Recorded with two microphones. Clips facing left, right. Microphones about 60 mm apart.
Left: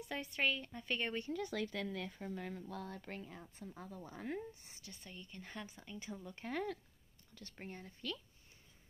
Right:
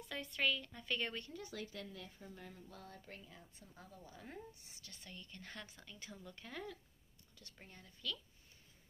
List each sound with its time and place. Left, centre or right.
0.0 s speech: centre
1.3 s speech: left
3.3 s a woman's voice: left
4.9 s speech: centre
6.4 s a woman's voice: left